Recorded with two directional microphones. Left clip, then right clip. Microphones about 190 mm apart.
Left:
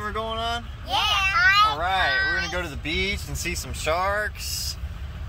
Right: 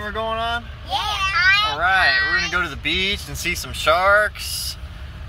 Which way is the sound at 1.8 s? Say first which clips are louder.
Right 6 dB; 20° right (ahead or behind).